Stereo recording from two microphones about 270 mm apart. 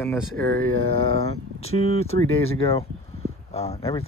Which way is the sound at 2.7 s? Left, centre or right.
Left.